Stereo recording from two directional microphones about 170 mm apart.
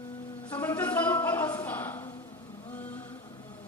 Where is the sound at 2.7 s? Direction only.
10° left (ahead or behind).